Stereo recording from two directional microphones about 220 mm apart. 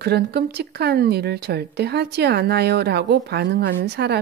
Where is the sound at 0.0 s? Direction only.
45° right (ahead or behind).